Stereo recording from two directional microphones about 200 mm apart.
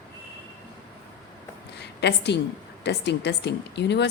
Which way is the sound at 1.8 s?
55° left (ahead or behind).